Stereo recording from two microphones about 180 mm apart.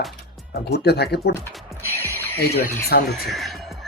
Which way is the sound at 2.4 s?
60° left (ahead or behind).